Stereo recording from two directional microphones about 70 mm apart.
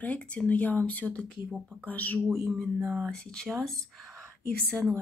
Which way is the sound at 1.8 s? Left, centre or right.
Left.